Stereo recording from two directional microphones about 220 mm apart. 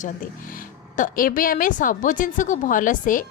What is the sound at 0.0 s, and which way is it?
Speech, 40° left (ahead or behind).